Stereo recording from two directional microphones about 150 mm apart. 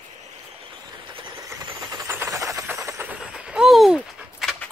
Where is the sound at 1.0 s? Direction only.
35° right (ahead or behind).